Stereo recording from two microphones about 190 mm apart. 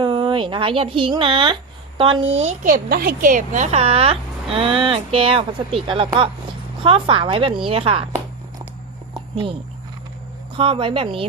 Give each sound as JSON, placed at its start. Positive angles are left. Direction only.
{"t": 0.0, "sound": "a woman's voice", "side_deg": -25}
{"t": 9.1, "sound": "a sound", "side_deg": -25}
{"t": 10.6, "sound": "speech", "side_deg": -30}